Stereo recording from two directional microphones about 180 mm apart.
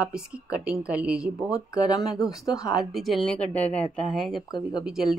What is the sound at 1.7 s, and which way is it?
Speech, 20° left (ahead or behind).